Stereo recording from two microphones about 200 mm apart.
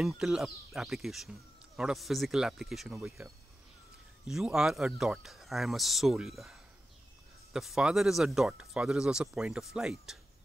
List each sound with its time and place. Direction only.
0.0 s speech: centre (ahead or behind)